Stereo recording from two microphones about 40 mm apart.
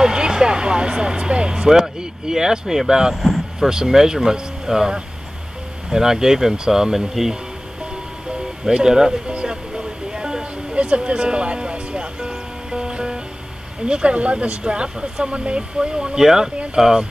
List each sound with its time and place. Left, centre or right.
0.0 s speech: centre
3.2 s vehicle: centre
3.5 s speech: centre
8.6 s speech: centre
10.1 s music: centre
13.8 s speech: right